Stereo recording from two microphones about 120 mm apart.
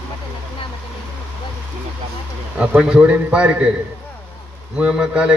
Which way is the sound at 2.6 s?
10° right (ahead or behind).